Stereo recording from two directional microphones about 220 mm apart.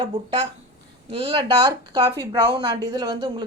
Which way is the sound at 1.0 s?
25° right (ahead or behind).